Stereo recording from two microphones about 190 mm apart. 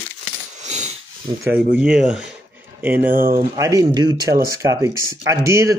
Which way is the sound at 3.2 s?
50° right (ahead or behind).